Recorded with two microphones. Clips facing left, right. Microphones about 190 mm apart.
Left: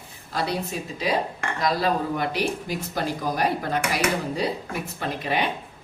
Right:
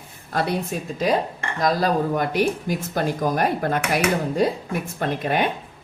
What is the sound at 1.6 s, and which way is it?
Speech, 45° right (ahead or behind).